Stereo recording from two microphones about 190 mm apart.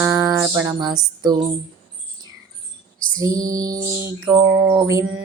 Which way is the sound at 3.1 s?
20° right (ahead or behind).